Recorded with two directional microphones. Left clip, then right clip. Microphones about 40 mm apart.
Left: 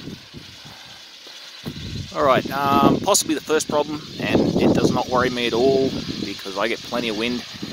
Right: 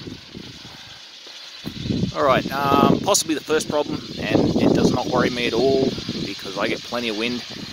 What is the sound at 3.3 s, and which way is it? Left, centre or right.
Speech, left.